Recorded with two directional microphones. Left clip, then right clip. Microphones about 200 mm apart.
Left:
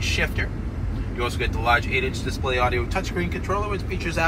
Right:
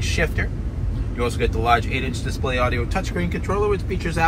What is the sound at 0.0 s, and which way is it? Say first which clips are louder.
Vehicle: right 1 dB; 15° left (ahead or behind).